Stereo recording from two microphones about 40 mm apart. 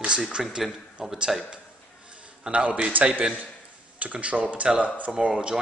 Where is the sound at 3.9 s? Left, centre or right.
Right.